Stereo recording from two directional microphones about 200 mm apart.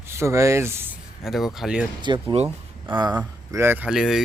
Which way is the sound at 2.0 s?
25° right (ahead or behind).